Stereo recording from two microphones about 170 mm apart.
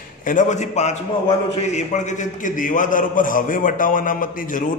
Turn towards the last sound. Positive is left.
turn(degrees=50)  # may be behind; listen again after turning